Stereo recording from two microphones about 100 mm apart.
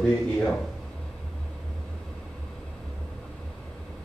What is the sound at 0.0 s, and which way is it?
Speech, 5° left (ahead or behind).